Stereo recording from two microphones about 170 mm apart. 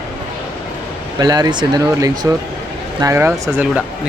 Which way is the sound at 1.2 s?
25° right (ahead or behind).